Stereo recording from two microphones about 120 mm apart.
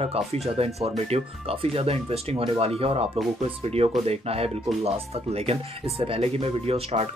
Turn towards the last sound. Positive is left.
turn(degrees=-60)  # may be behind; listen again after turning